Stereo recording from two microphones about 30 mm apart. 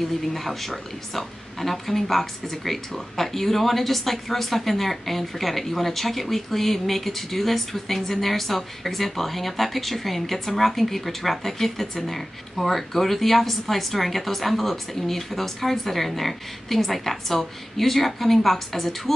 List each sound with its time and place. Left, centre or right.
0.3 s speech: centre